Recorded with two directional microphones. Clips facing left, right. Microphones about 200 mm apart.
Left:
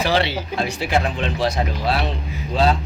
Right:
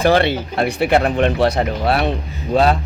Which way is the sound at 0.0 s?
50° right (ahead or behind).